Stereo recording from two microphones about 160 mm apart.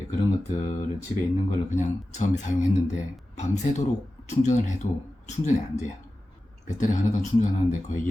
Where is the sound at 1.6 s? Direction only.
45° left (ahead or behind).